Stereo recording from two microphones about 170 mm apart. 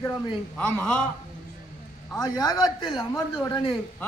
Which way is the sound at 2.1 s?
20° left (ahead or behind).